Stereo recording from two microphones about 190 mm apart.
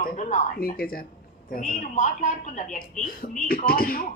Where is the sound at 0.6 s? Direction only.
50° left (ahead or behind).